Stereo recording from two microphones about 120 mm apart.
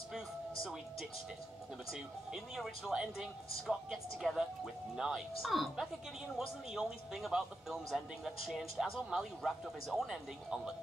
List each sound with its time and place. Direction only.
1.9 s speech: centre (ahead or behind)